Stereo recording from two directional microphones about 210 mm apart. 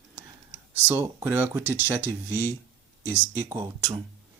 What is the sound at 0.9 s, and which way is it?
Speech, 10° right (ahead or behind).